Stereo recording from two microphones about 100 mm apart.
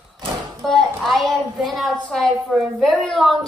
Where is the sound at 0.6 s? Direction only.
Centre (ahead or behind).